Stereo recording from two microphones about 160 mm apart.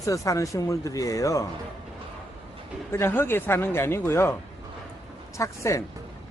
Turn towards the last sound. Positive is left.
turn(degrees=20)  # may be behind; listen again after turning